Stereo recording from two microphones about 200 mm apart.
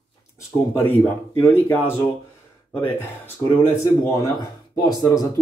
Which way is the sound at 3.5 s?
10° left (ahead or behind).